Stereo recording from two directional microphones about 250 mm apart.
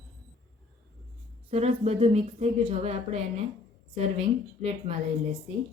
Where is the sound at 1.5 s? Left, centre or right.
Right.